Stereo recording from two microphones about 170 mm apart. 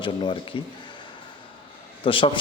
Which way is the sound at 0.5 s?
30° left (ahead or behind).